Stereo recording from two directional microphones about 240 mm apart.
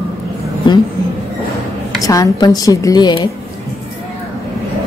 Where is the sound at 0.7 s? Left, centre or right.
Centre.